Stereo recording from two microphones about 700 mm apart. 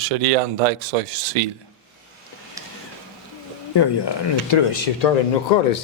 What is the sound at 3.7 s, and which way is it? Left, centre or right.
Speech, left.